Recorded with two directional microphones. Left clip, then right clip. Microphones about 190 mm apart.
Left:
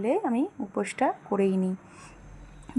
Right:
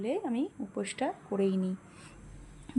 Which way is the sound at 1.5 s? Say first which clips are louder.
Left 5 dB; 50° left (ahead or behind).